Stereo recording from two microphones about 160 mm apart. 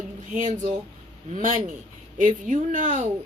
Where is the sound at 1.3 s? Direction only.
55° right (ahead or behind).